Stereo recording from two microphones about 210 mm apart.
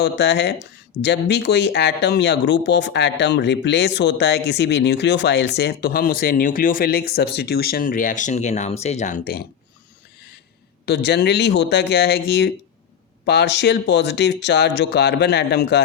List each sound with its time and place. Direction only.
0.0 s speech: 55° left (ahead or behind)
10.8 s speech: 55° left (ahead or behind)